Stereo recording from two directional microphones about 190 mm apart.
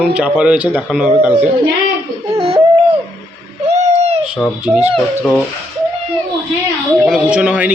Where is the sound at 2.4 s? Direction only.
30° right (ahead or behind).